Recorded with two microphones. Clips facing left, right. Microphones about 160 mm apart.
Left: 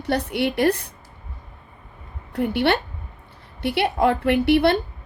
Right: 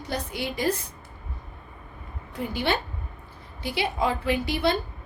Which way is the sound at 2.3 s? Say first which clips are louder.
Left 7 dB; 65° left (ahead or behind).